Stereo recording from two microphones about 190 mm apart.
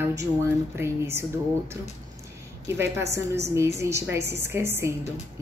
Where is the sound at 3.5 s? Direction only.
15° right (ahead or behind).